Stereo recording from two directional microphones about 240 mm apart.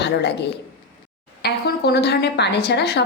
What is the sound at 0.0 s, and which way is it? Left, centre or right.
Speech, left.